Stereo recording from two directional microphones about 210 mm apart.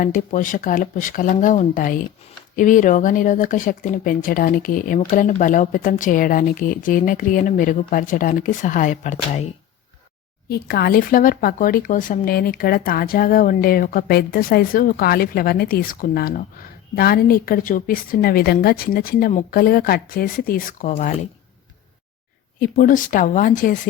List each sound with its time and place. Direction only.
0.0 s speech: 40° left (ahead or behind)
10.5 s speech: 45° left (ahead or behind)
22.7 s speech: 40° left (ahead or behind)